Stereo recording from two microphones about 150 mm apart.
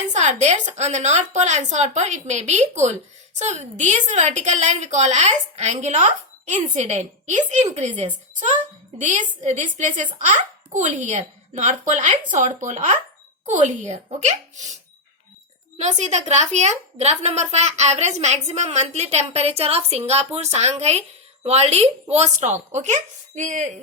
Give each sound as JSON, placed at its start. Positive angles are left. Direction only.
{"t": 0.1, "sound": "a woman's voice", "side_deg": -50}
{"t": 15.8, "sound": "a woman's voice", "side_deg": -50}